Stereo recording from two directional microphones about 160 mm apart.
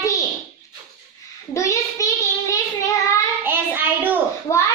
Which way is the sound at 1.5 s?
20° left (ahead or behind).